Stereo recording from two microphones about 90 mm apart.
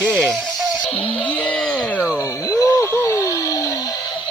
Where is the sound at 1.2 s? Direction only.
15° left (ahead or behind).